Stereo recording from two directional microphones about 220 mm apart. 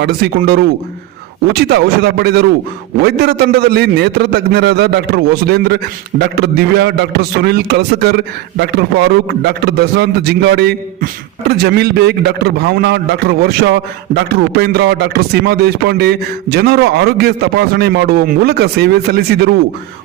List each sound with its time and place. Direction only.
0.0 s a man's voice: 45° right (ahead or behind)